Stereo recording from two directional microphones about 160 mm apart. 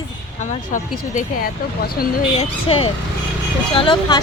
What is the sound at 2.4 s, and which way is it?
Speech, 35° left (ahead or behind).